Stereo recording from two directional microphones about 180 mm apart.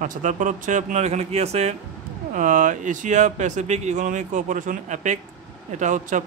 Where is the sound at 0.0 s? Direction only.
45° right (ahead or behind).